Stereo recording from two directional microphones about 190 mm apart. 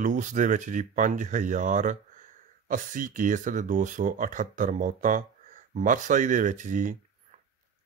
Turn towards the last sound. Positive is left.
turn(degrees=-45)  # may be behind; listen again after turning